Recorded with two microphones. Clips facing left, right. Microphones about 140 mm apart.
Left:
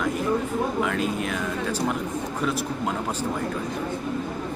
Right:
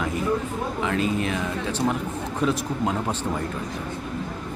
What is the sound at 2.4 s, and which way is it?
Speech, 10° right (ahead or behind).